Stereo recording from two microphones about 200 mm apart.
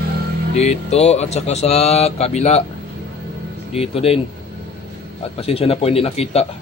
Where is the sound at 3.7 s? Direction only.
30° left (ahead or behind).